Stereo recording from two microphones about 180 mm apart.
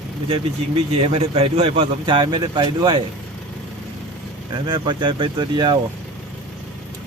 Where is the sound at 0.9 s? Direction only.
30° right (ahead or behind).